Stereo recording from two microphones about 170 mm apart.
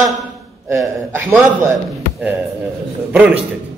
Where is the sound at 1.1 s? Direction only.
15° right (ahead or behind).